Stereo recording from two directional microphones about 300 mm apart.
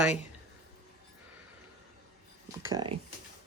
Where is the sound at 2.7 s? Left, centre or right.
Centre.